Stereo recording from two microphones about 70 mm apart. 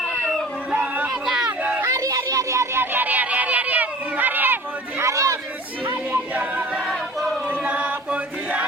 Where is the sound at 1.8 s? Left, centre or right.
Right.